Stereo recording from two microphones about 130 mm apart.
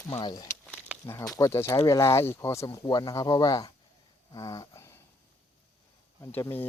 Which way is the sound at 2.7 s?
30° left (ahead or behind).